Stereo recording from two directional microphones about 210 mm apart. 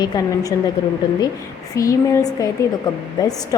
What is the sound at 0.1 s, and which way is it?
Speech, 20° left (ahead or behind).